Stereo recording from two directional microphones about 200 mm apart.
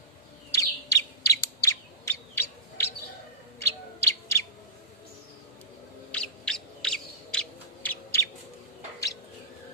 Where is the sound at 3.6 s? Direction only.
15° left (ahead or behind).